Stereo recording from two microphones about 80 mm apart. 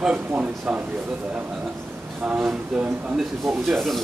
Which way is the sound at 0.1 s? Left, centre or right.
Centre.